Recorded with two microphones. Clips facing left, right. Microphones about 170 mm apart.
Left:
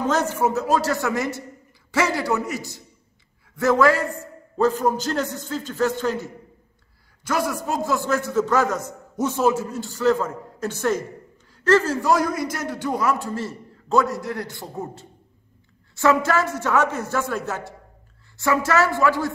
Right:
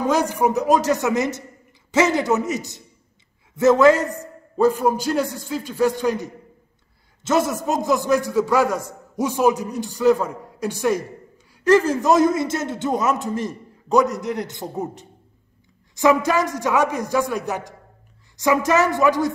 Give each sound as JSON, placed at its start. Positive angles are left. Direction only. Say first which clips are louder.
{"t": 0.0, "sound": "a man's voice", "louder": "right 2 dB", "side_deg": -10}